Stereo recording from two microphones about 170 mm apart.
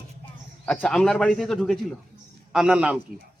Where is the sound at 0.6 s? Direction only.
5° left (ahead or behind).